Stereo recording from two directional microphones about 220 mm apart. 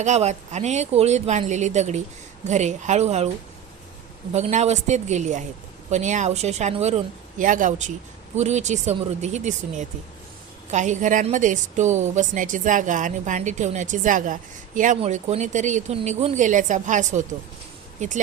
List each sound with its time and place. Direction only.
0.0 s a woman's voice: 30° right (ahead or behind)
4.3 s a woman's voice: 30° right (ahead or behind)